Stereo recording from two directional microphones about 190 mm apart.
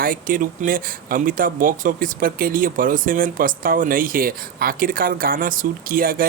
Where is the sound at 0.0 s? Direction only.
45° right (ahead or behind).